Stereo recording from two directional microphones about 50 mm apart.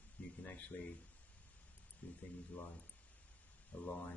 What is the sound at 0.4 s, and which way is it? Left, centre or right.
Speech, left.